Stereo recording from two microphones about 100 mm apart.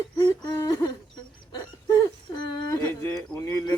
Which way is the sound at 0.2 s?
45° left (ahead or behind).